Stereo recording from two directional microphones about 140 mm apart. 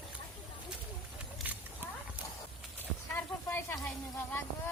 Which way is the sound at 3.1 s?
15° left (ahead or behind).